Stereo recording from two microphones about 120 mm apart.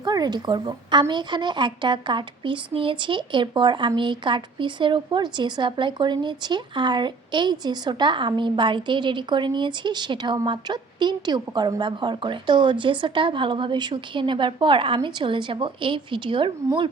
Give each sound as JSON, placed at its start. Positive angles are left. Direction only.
{"t": 0.0, "sound": "a woman's voice", "side_deg": -35}